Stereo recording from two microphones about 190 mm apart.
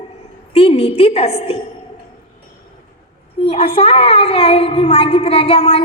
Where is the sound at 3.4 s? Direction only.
30° left (ahead or behind).